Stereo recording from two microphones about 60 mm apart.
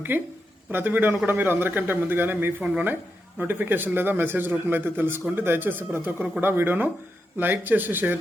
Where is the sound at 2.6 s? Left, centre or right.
Centre.